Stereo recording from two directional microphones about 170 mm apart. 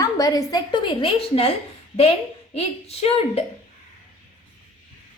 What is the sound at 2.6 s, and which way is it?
Speech, 35° left (ahead or behind).